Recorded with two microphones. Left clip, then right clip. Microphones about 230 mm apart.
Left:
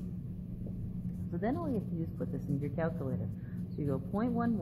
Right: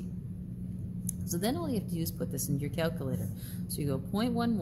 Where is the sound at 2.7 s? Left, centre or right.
Right.